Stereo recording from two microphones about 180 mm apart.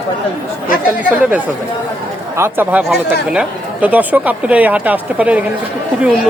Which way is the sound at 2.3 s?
15° right (ahead or behind).